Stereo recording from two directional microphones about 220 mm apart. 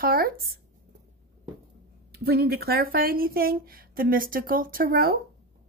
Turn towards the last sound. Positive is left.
turn(degrees=-45)  # may be behind; listen again after turning